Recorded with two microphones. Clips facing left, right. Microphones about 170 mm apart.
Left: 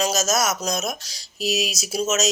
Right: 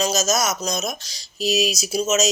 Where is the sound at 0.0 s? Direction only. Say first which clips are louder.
Right 1 dB; 5° left (ahead or behind).